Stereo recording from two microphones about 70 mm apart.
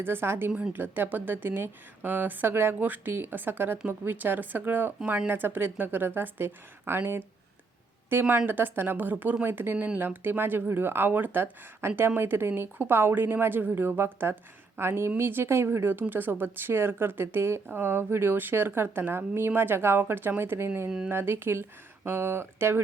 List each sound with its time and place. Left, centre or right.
0.0 s speech: right
9.7 s speech: centre
10.0 s speech: right